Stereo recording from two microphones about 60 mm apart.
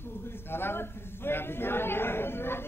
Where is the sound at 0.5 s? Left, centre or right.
Left.